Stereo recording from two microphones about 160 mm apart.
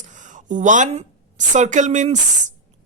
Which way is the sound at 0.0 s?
50° right (ahead or behind).